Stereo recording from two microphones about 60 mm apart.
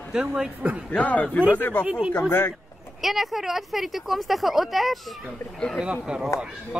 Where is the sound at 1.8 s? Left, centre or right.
Centre.